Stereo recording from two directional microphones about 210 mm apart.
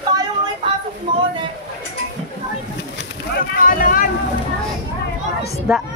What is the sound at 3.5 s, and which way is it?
Speech, 40° left (ahead or behind).